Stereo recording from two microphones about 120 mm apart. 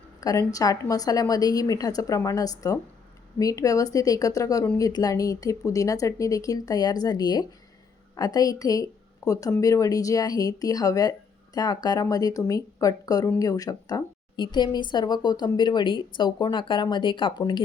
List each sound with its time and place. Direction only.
0.2 s a woman's voice: 30° left (ahead or behind)